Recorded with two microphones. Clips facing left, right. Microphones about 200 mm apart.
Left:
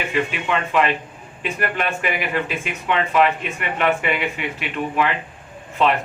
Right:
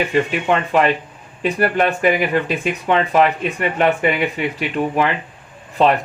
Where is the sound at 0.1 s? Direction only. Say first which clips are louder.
Right 5 dB; 40° right (ahead or behind).